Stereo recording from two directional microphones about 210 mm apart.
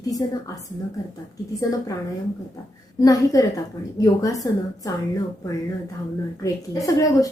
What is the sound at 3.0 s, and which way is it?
A woman's voice, 15° left (ahead or behind).